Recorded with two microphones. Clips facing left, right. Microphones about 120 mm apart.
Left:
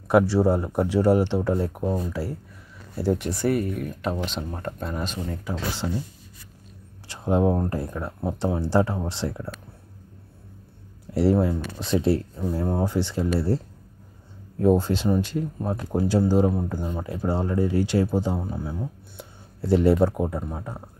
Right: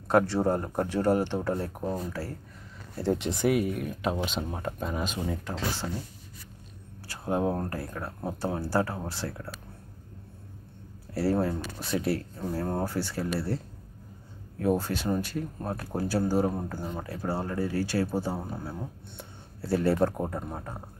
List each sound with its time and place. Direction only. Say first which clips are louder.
0.1 s speech: left 5 dB; 10° left (ahead or behind)
3.3 s speech: left 2 dB; centre (ahead or behind)
5.4 s speech: left 3 dB; 15° left (ahead or behind)
7.1 s speech: left 6 dB; 20° left (ahead or behind)
11.1 s speech: left 6 dB; 15° left (ahead or behind)
11.8 s speech: left 7 dB; 25° left (ahead or behind)
12.5 s speech: left 5 dB; 15° left (ahead or behind)
14.6 s speech: left 7 dB; 25° left (ahead or behind); by 20.4 s 10° left (ahead or behind)